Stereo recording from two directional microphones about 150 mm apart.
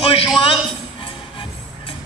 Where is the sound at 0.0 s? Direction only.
35° left (ahead or behind).